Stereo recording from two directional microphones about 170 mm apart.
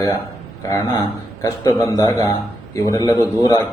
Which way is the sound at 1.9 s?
20° left (ahead or behind).